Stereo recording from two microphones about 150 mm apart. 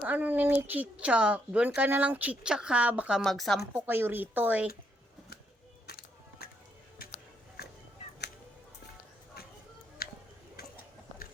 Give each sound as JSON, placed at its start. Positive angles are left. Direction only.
{"t": 0.0, "sound": "speech", "side_deg": -10}
{"t": 3.8, "sound": "speech", "side_deg": -15}
{"t": 5.9, "sound": "music", "side_deg": 90}
{"t": 7.6, "sound": "music", "side_deg": 90}
{"t": 10.0, "sound": "a sound", "side_deg": 90}